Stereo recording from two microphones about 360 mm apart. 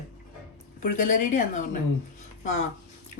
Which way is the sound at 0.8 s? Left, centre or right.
Left.